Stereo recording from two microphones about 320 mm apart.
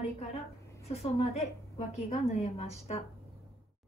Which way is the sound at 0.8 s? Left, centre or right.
Centre.